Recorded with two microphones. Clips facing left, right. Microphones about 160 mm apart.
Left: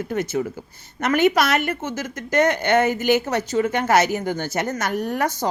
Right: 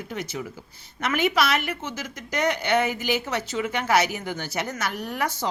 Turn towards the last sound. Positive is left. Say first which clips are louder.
# left 6 dB
turn(degrees=45)  # may be behind; listen again after turning